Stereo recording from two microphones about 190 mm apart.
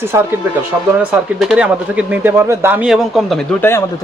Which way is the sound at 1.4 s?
5° right (ahead or behind).